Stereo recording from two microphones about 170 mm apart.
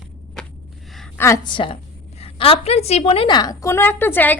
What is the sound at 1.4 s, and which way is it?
A woman's voice, 30° left (ahead or behind).